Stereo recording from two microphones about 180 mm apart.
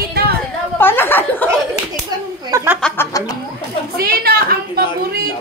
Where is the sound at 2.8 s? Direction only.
5° left (ahead or behind).